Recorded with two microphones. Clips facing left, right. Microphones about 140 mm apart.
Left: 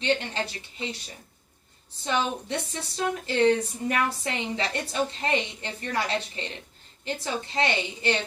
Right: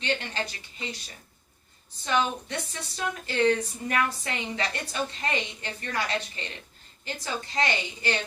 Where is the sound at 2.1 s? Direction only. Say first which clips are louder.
Even; 25° left (ahead or behind).